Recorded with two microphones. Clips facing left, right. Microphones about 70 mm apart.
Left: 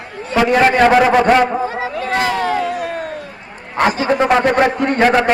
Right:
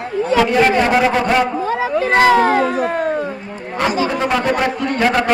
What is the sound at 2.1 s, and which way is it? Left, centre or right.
Speech, right.